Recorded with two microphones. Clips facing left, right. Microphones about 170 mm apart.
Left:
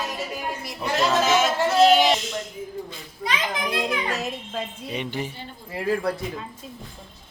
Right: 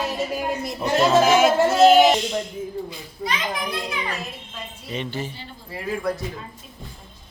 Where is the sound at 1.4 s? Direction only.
50° right (ahead or behind).